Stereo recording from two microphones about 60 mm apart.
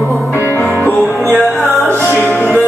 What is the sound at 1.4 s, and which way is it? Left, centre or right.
Music, centre.